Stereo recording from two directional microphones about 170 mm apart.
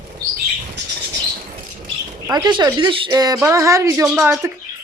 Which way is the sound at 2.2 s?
25° right (ahead or behind).